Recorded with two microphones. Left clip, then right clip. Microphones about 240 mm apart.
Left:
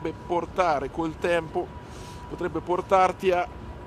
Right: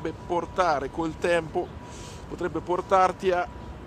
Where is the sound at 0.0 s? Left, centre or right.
Centre.